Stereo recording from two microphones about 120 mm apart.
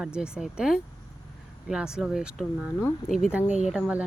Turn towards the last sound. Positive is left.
turn(degrees=-5)  # may be behind; listen again after turning